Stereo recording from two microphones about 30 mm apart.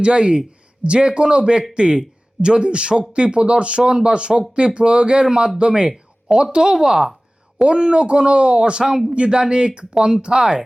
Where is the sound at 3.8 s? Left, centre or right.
Right.